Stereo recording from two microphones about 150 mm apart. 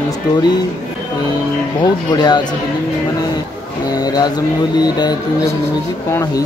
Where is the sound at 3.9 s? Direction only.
25° left (ahead or behind).